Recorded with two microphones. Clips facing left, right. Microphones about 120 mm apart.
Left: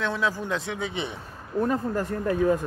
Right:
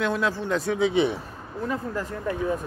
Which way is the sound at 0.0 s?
5° right (ahead or behind).